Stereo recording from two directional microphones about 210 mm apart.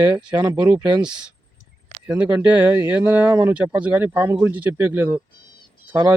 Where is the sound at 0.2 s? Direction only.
20° right (ahead or behind).